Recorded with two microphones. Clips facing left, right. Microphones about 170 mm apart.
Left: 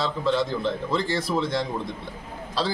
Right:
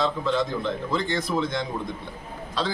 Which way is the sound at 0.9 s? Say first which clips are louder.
Right 1 dB; 35° left (ahead or behind).